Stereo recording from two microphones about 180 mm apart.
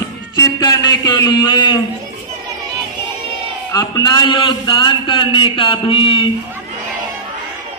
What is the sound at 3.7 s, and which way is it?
A man's voice, 20° left (ahead or behind).